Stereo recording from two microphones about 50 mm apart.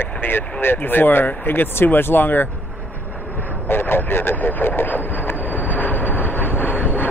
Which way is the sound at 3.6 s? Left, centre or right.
Left.